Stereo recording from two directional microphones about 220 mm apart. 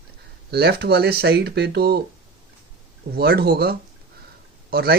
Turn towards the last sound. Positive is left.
turn(degrees=-45)  # may be behind; listen again after turning